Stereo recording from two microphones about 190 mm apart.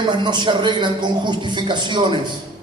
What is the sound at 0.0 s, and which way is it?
A man's voice, 25° right (ahead or behind).